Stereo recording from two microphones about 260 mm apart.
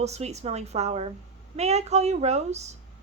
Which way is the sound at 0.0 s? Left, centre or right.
Right.